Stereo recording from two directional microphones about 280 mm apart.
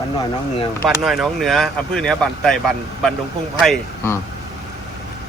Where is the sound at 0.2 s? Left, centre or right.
Centre.